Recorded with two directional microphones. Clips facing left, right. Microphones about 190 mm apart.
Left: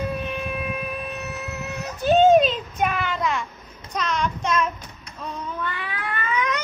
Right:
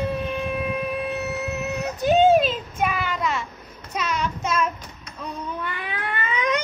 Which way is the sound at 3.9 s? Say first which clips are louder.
Left 1 dB; 10° right (ahead or behind).